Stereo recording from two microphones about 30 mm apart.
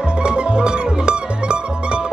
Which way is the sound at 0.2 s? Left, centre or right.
Right.